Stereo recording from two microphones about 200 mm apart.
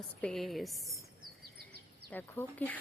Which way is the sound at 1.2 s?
50° right (ahead or behind).